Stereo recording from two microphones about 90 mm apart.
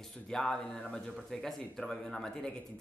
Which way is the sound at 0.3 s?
5° left (ahead or behind).